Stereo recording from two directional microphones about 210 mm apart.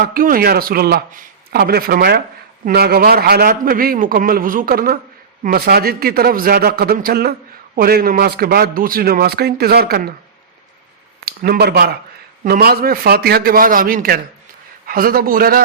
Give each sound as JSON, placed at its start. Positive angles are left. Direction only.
{"t": 0.0, "sound": "a man's voice", "side_deg": -45}
{"t": 11.3, "sound": "a man's voice", "side_deg": -45}